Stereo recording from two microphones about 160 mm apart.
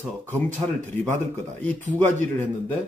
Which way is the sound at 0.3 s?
50° right (ahead or behind).